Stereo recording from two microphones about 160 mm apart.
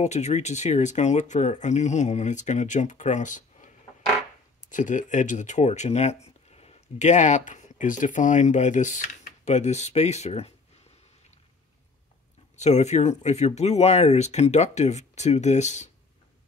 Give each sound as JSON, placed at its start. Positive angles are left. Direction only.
{"t": 0.0, "sound": "speech", "side_deg": 45}
{"t": 12.5, "sound": "speech", "side_deg": 45}